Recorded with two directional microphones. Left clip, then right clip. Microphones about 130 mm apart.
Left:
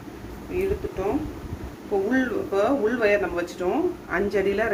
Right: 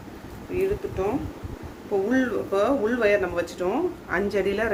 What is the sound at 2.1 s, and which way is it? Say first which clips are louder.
Speech: even; 30° right (ahead or behind).